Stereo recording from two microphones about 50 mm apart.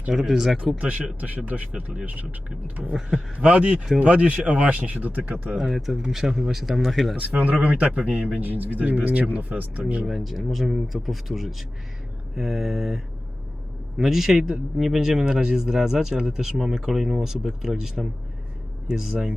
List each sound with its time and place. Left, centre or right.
0.1 s speech: centre
0.8 s speech: right
1.5 s speech: centre
2.6 s speech: right
5.5 s speech: centre
7.2 s speech: right
10.1 s speech: centre
14.0 s speech: centre